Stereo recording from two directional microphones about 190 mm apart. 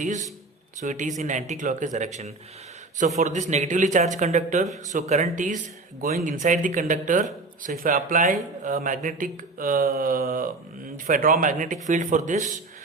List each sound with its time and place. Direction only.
0.0 s speech: 40° right (ahead or behind)